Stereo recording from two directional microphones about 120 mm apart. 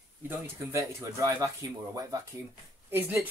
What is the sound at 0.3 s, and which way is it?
Speech, 25° right (ahead or behind).